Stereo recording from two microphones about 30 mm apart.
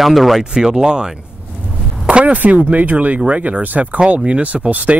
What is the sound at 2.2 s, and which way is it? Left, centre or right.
Speech, right.